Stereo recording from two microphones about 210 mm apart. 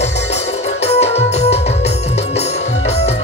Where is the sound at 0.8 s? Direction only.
30° left (ahead or behind).